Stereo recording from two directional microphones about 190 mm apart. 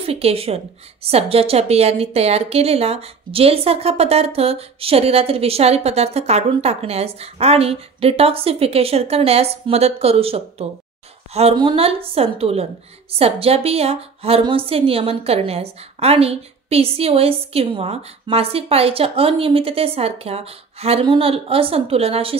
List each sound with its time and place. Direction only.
0.0 s a woman's voice: 30° right (ahead or behind)